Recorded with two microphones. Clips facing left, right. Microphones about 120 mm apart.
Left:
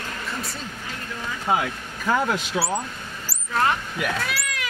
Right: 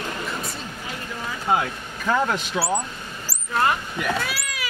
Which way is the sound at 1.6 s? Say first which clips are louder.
Even; centre (ahead or behind).